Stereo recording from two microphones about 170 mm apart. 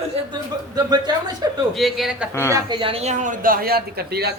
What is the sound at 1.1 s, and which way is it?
Speech, 25° right (ahead or behind).